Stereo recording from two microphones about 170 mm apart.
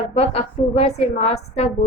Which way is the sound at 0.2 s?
35° left (ahead or behind).